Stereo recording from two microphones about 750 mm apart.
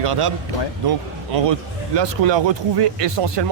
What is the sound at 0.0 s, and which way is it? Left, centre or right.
Speech, right.